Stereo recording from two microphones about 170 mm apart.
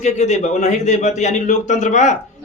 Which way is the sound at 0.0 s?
40° left (ahead or behind).